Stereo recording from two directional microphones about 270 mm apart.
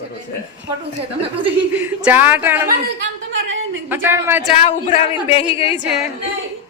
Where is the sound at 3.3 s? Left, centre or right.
Right.